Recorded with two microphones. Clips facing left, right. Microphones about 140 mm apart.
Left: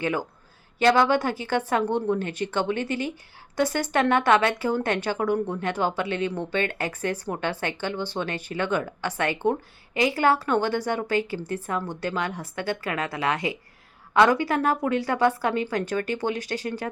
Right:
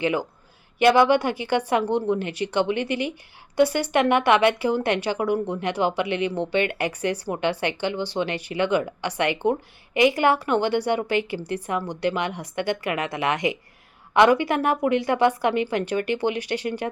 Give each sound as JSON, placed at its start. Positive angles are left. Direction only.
{"t": 0.0, "sound": "speech", "side_deg": -15}
{"t": 2.1, "sound": "speech", "side_deg": 50}
{"t": 2.5, "sound": "speech", "side_deg": -15}
{"t": 10.6, "sound": "speech", "side_deg": 45}
{"t": 11.1, "sound": "speech", "side_deg": -15}
{"t": 16.4, "sound": "speech", "side_deg": 40}
{"t": 16.6, "sound": "speech", "side_deg": -20}